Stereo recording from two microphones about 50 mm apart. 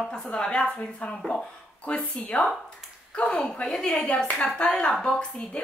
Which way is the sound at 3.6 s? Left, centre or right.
Centre.